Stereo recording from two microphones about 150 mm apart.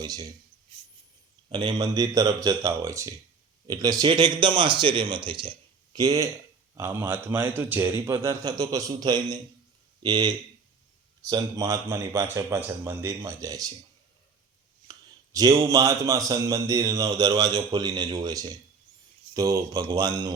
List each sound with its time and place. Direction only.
0.0 s a man's voice: 25° right (ahead or behind)
1.5 s a man's voice: 35° right (ahead or behind)
1.8 s a man's voice: 25° right (ahead or behind)
14.8 s a man's voice: 25° right (ahead or behind)